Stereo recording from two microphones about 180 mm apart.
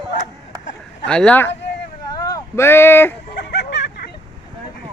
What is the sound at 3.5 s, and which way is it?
Vehicle, 75° left (ahead or behind).